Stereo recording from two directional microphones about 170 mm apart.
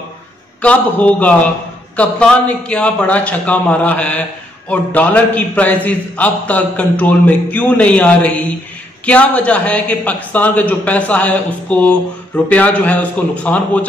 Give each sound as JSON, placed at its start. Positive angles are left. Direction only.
{"t": 0.6, "sound": "a man's voice", "side_deg": 10}